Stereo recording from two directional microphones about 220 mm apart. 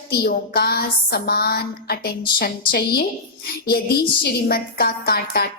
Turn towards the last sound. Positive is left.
turn(degrees=45)  # may be behind; listen again after turning